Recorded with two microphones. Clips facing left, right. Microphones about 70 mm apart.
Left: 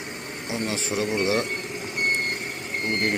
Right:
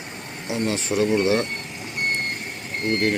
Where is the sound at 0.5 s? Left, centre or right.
Centre.